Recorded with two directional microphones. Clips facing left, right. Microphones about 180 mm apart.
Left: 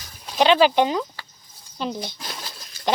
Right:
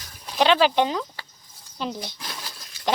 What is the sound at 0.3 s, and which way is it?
Speech, centre (ahead or behind).